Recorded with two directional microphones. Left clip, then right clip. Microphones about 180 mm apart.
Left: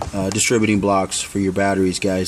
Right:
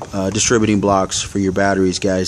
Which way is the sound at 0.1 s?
5° right (ahead or behind).